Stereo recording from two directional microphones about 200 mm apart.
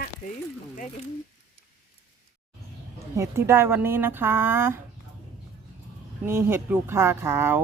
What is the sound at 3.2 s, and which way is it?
Speech, 15° right (ahead or behind).